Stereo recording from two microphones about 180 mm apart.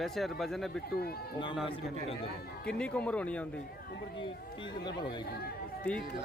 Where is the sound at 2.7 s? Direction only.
5° left (ahead or behind).